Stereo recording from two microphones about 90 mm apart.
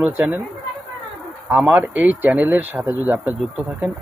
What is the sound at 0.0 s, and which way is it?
Speech, 20° right (ahead or behind).